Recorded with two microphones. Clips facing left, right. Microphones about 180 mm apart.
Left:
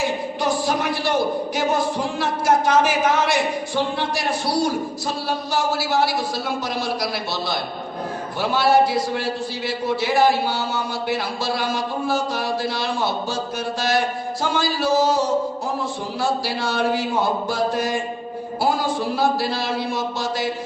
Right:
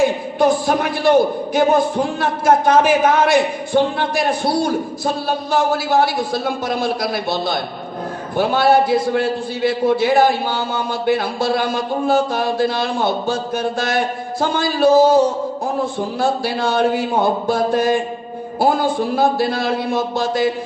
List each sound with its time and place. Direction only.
0.0 s a sound: 55° right (ahead or behind)
1.5 s a man's voice: 55° right (ahead or behind)
16.2 s a man's voice: 55° right (ahead or behind)